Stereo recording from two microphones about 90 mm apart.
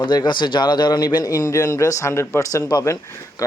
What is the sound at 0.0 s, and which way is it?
A man's voice, 55° left (ahead or behind).